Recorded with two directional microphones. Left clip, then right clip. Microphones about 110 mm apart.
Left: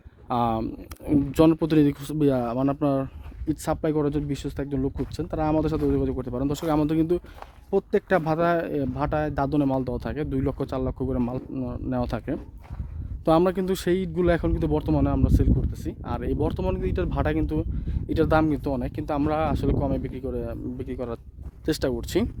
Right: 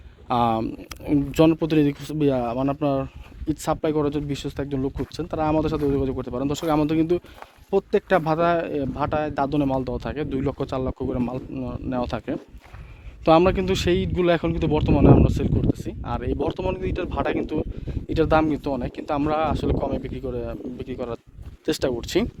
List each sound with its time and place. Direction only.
0.3 s speech: 15° left (ahead or behind)
0.9 s speech: 25° left (ahead or behind)
1.4 s speech: 45° left (ahead or behind); by 7.2 s 30° left (ahead or behind)
7.7 s speech: 40° left (ahead or behind)
13.2 s speech: 30° left (ahead or behind)
22.0 s speech: 30° left (ahead or behind)